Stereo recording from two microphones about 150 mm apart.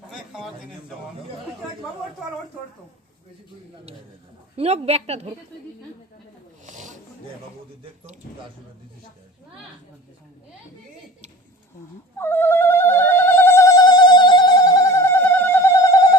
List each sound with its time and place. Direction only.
0.1 s a sound: 5° right (ahead or behind)
4.5 s a woman's voice: 40° right (ahead or behind)
6.7 s wild animals: 55° right (ahead or behind)
12.2 s music: 15° left (ahead or behind)